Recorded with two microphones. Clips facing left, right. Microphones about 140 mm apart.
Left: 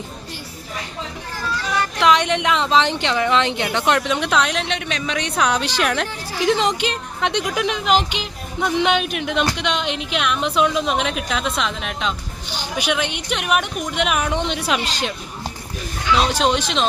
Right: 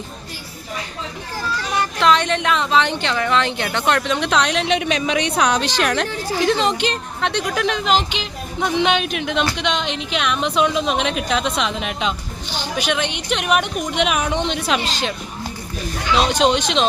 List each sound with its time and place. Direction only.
2.0 s speech: 15° left (ahead or behind)
4.7 s speech: 10° right (ahead or behind)
5.2 s a woman's voice: 5° left (ahead or behind)
12.5 s a woman's voice: 10° left (ahead or behind)
16.3 s a woman's voice: 5° left (ahead or behind)